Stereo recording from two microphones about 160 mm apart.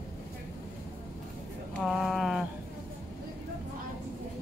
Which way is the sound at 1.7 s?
Centre (ahead or behind).